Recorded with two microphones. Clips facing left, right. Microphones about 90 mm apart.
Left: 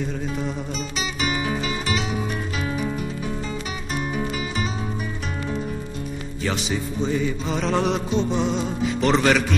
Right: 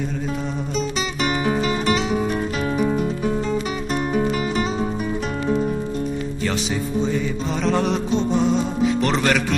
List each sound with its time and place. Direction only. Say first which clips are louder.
1.4 s music: right 5 dB; 40° right (ahead or behind)
7.0 s music: right 1 dB; centre (ahead or behind)